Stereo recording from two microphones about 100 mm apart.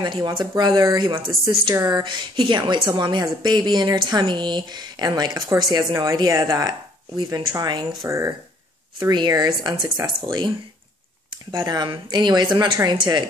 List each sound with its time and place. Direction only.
0.0 s a woman's voice: 50° right (ahead or behind)
1.9 s a woman's voice: 45° right (ahead or behind)
9.3 s a woman's voice: 45° right (ahead or behind)
11.5 s a woman's voice: 45° right (ahead or behind)